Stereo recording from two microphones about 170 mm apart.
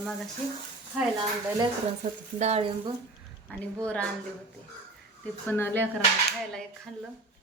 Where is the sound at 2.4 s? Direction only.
35° right (ahead or behind).